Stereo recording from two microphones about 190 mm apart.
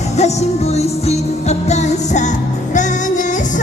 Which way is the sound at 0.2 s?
35° left (ahead or behind).